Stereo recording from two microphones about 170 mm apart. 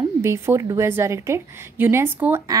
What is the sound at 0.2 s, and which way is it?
A woman's voice, 15° right (ahead or behind).